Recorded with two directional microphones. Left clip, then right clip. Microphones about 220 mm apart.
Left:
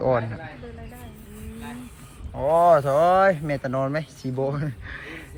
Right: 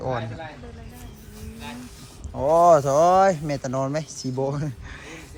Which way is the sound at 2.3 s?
30° right (ahead or behind).